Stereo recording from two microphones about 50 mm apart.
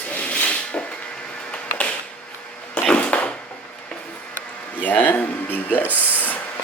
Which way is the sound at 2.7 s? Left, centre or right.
Left.